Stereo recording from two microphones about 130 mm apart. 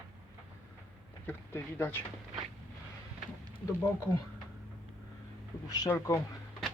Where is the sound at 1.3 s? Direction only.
15° left (ahead or behind).